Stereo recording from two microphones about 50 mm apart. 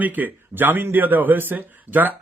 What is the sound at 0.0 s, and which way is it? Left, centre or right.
Speech, right.